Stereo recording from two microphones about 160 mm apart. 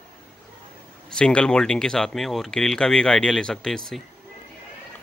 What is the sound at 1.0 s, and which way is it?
Speech, 5° left (ahead or behind).